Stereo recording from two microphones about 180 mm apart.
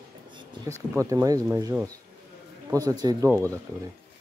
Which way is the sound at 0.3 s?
25° right (ahead or behind).